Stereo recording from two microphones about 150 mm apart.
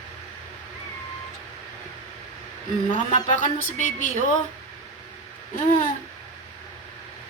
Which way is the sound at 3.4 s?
55° left (ahead or behind).